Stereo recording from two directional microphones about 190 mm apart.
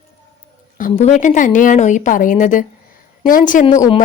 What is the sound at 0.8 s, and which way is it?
A woman's voice, 40° left (ahead or behind).